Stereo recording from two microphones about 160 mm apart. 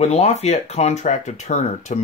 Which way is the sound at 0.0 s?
45° left (ahead or behind).